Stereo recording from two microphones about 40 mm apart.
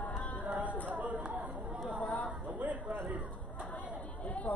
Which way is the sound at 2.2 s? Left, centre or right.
Right.